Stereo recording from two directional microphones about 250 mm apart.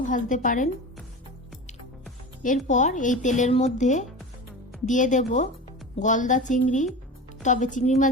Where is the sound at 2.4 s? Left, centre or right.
Left.